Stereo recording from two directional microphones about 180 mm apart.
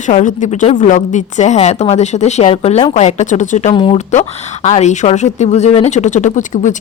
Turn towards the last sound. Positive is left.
turn(degrees=45)  # may be behind; listen again after turning